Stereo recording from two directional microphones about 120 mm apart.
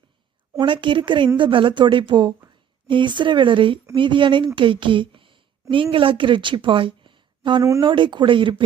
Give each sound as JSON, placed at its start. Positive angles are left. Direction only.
{"t": 0.6, "sound": "a woman's voice", "side_deg": -40}